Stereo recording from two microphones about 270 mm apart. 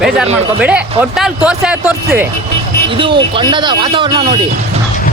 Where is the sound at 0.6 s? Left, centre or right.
Centre.